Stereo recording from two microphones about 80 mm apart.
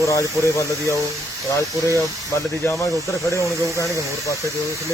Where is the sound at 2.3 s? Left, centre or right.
Left.